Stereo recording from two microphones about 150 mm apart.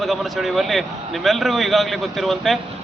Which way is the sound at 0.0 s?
Centre (ahead or behind).